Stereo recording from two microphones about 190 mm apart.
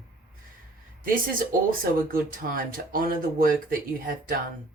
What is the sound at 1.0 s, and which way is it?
Speech, 45° right (ahead or behind).